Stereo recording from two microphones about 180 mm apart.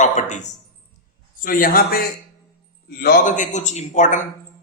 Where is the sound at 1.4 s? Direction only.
50° left (ahead or behind).